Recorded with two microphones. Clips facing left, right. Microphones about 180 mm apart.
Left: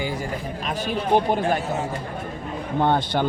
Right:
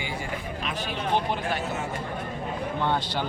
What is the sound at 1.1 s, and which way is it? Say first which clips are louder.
Speech: left 7 dB; 45° left (ahead or behind).